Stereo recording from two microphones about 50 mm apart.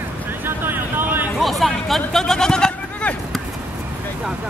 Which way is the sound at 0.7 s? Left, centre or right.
Right.